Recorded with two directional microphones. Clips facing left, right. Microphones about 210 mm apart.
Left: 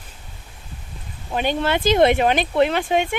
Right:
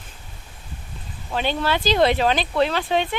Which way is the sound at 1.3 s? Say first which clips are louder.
Left 2 dB; 15° left (ahead or behind).